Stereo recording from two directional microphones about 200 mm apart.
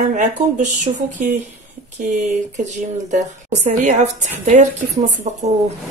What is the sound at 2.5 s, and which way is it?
A woman's voice, 35° right (ahead or behind).